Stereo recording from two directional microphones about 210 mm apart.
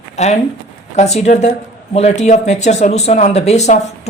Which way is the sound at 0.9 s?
30° left (ahead or behind).